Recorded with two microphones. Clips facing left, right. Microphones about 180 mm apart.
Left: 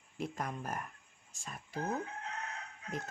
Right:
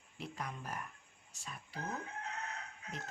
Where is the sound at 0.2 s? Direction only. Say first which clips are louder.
Left 5 dB; 45° left (ahead or behind).